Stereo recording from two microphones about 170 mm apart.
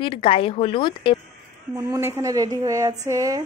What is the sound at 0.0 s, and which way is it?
A woman's voice, 30° left (ahead or behind).